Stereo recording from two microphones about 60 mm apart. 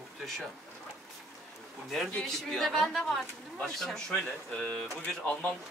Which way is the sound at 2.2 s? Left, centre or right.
Centre.